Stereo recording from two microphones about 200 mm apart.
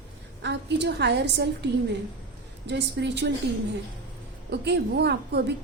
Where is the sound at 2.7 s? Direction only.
60° right (ahead or behind).